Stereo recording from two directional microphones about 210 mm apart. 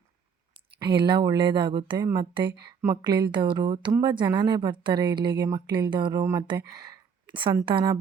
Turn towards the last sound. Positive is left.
turn(degrees=-20)  # may be behind; listen again after turning